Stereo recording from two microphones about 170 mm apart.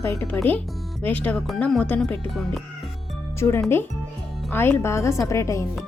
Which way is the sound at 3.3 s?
15° left (ahead or behind).